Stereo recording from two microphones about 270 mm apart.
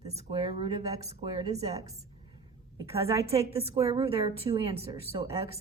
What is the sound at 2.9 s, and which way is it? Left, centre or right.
A woman's voice, right.